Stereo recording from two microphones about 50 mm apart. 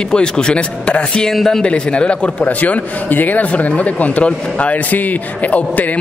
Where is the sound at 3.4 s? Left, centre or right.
Left.